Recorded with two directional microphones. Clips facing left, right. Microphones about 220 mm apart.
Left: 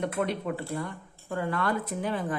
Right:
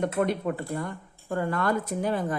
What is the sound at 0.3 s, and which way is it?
Speech, 45° right (ahead or behind).